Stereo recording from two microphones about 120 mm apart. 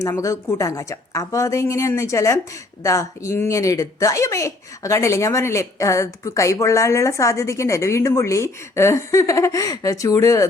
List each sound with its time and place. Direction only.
0.0 s speech: 25° left (ahead or behind)